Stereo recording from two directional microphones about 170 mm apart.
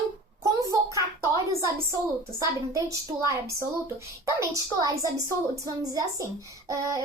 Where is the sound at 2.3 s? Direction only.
20° right (ahead or behind).